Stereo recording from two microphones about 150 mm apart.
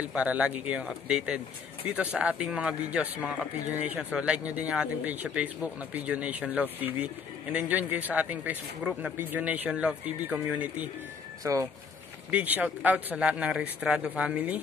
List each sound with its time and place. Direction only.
0.0 s a man's voice: 10° right (ahead or behind)
12.3 s a man's voice: 10° right (ahead or behind)